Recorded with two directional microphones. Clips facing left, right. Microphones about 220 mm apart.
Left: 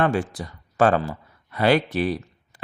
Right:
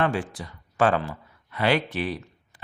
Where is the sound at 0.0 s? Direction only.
45° left (ahead or behind).